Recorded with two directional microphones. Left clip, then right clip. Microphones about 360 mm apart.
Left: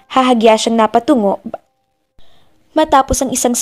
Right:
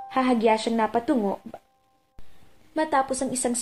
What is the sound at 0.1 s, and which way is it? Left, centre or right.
A woman's voice, left.